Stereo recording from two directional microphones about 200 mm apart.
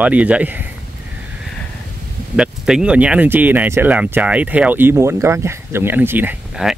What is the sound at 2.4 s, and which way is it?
Speech, 5° right (ahead or behind).